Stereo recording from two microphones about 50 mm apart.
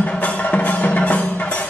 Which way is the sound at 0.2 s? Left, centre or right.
Left.